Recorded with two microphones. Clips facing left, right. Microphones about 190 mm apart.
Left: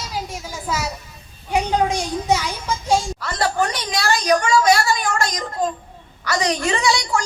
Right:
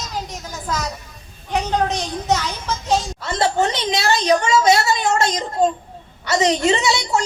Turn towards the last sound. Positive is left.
turn(degrees=-25)  # may be behind; listen again after turning